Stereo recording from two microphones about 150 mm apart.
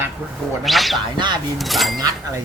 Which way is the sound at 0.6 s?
Centre (ahead or behind).